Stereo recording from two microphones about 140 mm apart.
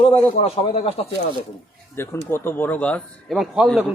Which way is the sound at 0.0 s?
45° left (ahead or behind).